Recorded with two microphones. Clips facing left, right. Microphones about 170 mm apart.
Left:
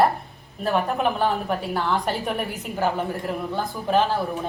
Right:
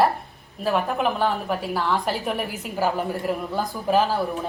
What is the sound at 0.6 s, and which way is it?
A woman's voice, centre (ahead or behind).